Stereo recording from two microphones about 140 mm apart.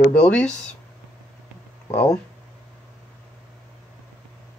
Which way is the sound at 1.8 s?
50° left (ahead or behind).